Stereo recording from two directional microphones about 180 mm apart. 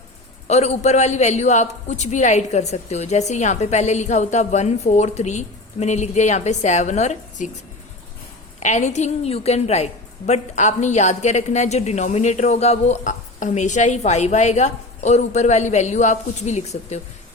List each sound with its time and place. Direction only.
0.4 s a woman's voice: 35° left (ahead or behind)
8.6 s a woman's voice: 40° left (ahead or behind)